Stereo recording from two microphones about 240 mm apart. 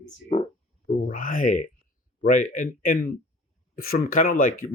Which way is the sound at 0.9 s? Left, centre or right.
Left.